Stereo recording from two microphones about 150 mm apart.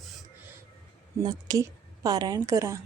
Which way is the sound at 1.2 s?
25° right (ahead or behind).